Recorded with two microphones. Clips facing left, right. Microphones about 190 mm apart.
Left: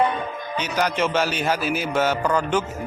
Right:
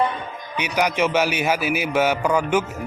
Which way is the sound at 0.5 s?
15° right (ahead or behind).